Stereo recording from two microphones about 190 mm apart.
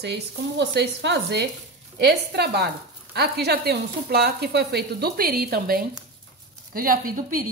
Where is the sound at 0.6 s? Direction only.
65° right (ahead or behind); by 7.4 s 45° right (ahead or behind).